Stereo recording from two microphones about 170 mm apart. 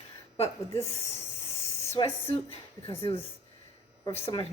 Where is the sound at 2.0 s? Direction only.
30° left (ahead or behind).